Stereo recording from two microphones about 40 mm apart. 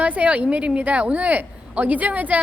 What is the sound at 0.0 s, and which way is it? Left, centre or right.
A woman's voice, right.